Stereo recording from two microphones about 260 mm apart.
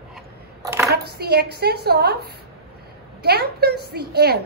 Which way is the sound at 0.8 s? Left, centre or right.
Right.